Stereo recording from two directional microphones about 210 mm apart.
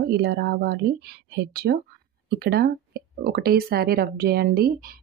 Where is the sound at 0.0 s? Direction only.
50° right (ahead or behind).